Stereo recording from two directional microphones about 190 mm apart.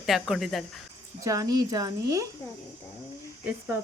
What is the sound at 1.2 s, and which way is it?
Speech, 20° right (ahead or behind).